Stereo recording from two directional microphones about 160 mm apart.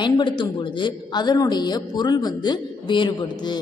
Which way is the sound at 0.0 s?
30° left (ahead or behind).